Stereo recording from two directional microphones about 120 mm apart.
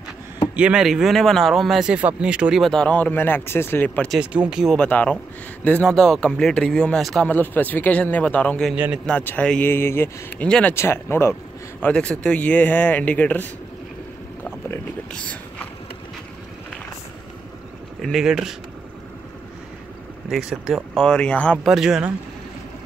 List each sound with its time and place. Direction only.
0.6 s speech: 5° right (ahead or behind)
2.7 s speech: 10° left (ahead or behind)
4.2 s speech: 10° right (ahead or behind)
4.7 s speech: 10° left (ahead or behind)
7.2 s speech: 15° left (ahead or behind)
8.7 s speech: 15° right (ahead or behind)
9.0 s speech: 15° left (ahead or behind)
11.8 s speech: 10° left (ahead or behind)
14.4 s boat: 10° left (ahead or behind)
18.0 s speech: 5° right (ahead or behind)
20.2 s speech: 5° right (ahead or behind)
20.9 s speech: 5° left (ahead or behind)
21.6 s speech: 5° right (ahead or behind)